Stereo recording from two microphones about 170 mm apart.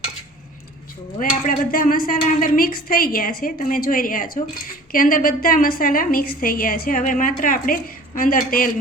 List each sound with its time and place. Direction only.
1.2 s a woman's voice: 55° left (ahead or behind)